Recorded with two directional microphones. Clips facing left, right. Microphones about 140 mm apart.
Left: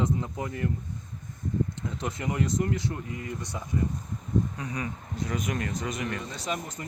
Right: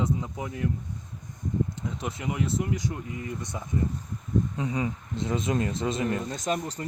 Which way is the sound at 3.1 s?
25° right (ahead or behind).